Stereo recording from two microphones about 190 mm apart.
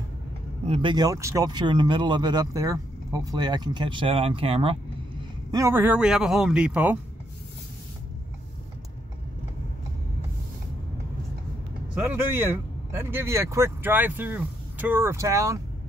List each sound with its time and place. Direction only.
0.7 s speech: 25° right (ahead or behind)
5.5 s a man's voice: 15° right (ahead or behind)
12.4 s speech: 10° right (ahead or behind)